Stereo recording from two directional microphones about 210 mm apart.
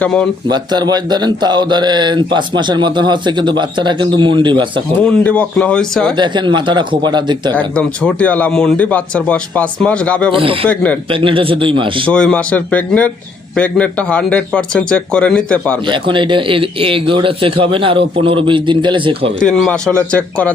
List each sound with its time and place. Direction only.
0.0 s speech: 5° left (ahead or behind)
0.4 s speech: 20° right (ahead or behind)
5.0 s speech: 5° left (ahead or behind)
6.1 s speech: 20° right (ahead or behind)
7.5 s speech: 5° left (ahead or behind)
10.3 s speech: 25° right (ahead or behind)
12.0 s speech: 5° left (ahead or behind)
15.9 s speech: 25° right (ahead or behind)
19.4 s speech: 5° left (ahead or behind)